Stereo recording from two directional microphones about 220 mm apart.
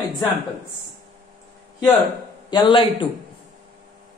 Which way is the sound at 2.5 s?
20° left (ahead or behind).